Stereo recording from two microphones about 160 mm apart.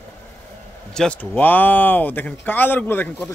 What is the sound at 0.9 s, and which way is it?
A man's voice, 5° left (ahead or behind).